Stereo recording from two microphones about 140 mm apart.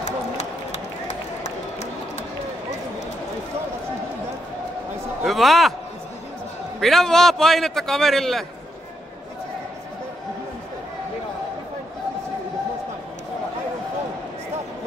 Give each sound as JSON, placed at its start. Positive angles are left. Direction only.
{"t": 0.0, "sound": "run", "side_deg": 55}
{"t": 5.2, "sound": "a man's voice", "side_deg": 0}
{"t": 6.8, "sound": "a man's voice", "side_deg": 0}